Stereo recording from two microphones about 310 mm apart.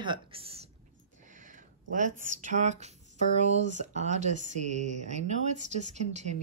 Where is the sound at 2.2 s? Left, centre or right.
Right.